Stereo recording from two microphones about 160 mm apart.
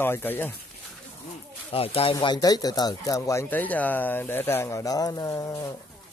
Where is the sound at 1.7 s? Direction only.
35° left (ahead or behind).